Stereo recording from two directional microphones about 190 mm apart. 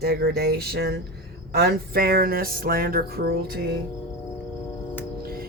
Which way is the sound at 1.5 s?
55° right (ahead or behind).